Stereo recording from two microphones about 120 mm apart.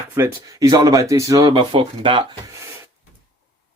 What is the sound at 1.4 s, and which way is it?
Speech, 45° right (ahead or behind).